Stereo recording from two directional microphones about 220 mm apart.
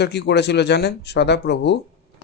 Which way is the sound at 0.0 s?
50° left (ahead or behind).